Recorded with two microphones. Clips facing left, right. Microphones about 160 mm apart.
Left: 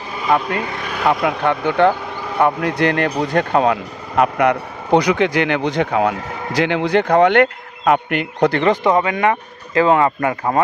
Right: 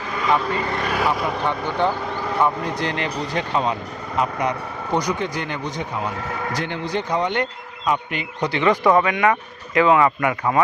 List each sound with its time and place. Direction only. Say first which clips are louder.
0.3 s speech: left 3 dB; 60° left (ahead or behind)
0.7 s vehicle: right 3 dB; centre (ahead or behind)
1.0 s speech: left 9 dB; 65° left (ahead or behind)
6.6 s speech: left 13 dB; 90° left; by 8.6 s 55° left (ahead or behind)
8.6 s speech: left 1 dB; 25° left (ahead or behind)